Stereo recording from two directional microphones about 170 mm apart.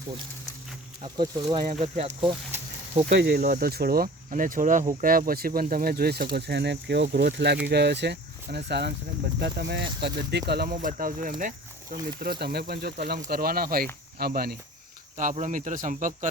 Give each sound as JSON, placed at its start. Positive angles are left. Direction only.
{"t": 1.0, "sound": "speech", "side_deg": -25}
{"t": 1.8, "sound": "speech", "side_deg": -40}
{"t": 3.1, "sound": "speech", "side_deg": -75}
{"t": 15.2, "sound": "speech", "side_deg": -50}